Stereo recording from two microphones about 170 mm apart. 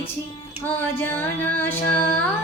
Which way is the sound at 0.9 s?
15° left (ahead or behind).